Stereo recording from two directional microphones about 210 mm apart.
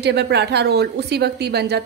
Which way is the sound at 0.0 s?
50° right (ahead or behind).